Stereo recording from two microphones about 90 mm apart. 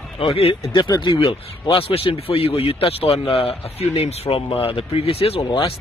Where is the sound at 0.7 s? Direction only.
50° left (ahead or behind).